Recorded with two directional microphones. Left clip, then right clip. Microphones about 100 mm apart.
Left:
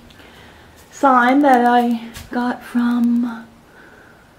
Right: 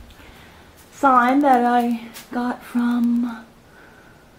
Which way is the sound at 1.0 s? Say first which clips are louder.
Left 2 dB; 15° left (ahead or behind).